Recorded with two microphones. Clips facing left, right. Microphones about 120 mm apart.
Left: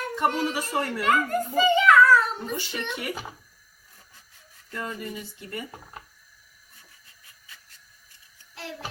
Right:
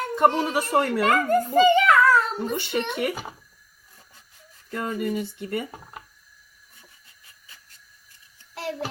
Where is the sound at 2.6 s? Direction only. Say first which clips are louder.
Right 7 dB; 55° right (ahead or behind).